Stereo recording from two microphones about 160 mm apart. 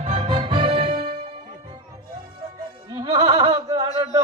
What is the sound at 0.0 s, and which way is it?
Music, 40° right (ahead or behind).